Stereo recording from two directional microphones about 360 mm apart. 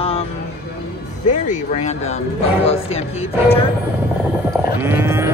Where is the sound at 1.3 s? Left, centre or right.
Centre.